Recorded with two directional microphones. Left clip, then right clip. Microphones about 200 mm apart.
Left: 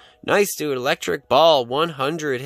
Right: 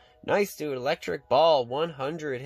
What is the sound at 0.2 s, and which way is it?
Speech, 55° left (ahead or behind).